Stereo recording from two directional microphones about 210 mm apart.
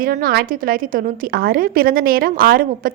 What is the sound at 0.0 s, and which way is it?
A woman's voice, 45° right (ahead or behind).